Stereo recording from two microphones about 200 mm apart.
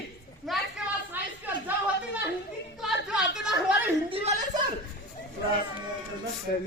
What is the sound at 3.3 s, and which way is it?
Speech, centre (ahead or behind).